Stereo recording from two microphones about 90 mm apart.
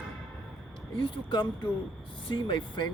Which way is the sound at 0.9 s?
65° left (ahead or behind).